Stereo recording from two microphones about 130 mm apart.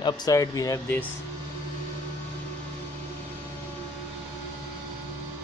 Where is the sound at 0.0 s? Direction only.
30° left (ahead or behind).